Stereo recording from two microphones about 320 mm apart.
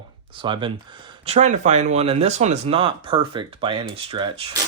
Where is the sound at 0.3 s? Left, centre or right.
Centre.